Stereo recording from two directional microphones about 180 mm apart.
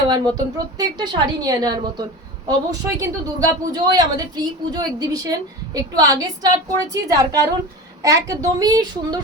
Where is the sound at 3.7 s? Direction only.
20° right (ahead or behind).